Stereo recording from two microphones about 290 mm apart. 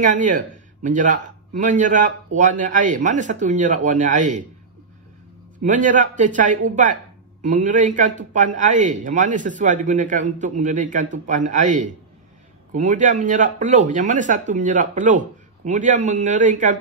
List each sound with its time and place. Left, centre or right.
0.0 s a man's voice: right
5.6 s a man's voice: right